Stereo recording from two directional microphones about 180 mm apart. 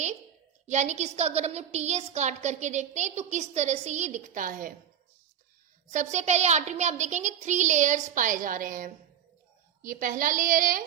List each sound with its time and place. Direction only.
0.7 s a woman's voice: 40° right (ahead or behind)
5.9 s a woman's voice: 40° right (ahead or behind)